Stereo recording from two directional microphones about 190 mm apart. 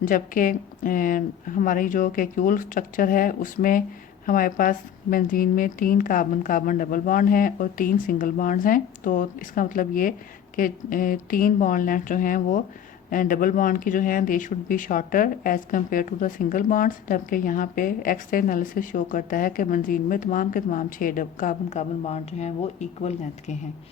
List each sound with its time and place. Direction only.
0.0 s speech: 45° left (ahead or behind)